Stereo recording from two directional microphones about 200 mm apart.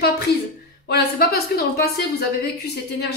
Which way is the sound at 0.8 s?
50° left (ahead or behind).